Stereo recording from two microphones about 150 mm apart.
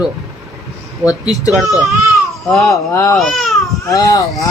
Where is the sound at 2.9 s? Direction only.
20° left (ahead or behind).